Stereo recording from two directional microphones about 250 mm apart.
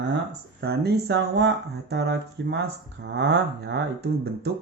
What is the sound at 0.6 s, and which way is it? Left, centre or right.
Speech, right.